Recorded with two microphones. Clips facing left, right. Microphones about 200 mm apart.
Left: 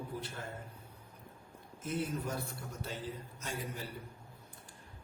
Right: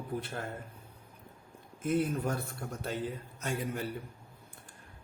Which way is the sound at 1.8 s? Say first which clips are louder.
Right 7 dB; 60° right (ahead or behind).